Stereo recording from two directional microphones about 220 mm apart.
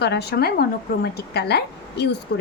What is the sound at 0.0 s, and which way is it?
A woman's voice, 50° left (ahead or behind).